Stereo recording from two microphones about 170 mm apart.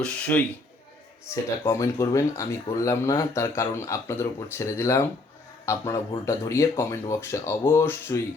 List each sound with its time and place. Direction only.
0.0 s speech: 10° left (ahead or behind)